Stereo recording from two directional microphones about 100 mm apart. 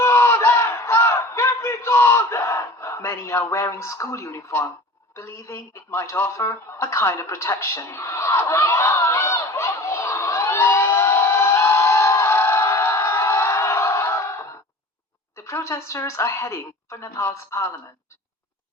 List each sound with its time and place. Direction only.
0.0 s battle cry: 25° left (ahead or behind)
5.1 s a sound: 30° left (ahead or behind)
15.4 s a woman's voice: 30° left (ahead or behind)